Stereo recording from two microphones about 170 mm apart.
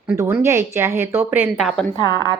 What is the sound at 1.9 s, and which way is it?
Speech, 25° left (ahead or behind).